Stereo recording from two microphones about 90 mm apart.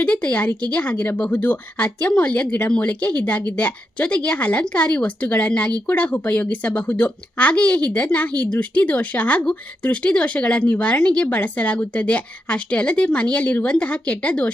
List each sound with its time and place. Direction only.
0.0 s speech: 15° left (ahead or behind)